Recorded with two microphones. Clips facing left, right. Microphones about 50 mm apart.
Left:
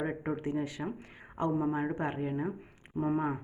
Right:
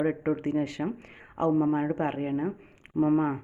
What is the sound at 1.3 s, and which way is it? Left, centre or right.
Speech, right.